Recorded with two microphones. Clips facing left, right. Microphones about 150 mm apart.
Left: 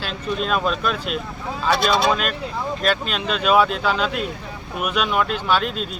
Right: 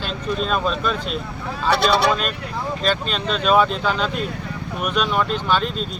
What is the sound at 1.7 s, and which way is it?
Speech, 65° right (ahead or behind).